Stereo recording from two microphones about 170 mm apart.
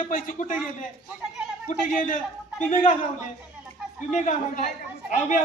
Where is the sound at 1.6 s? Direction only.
50° left (ahead or behind).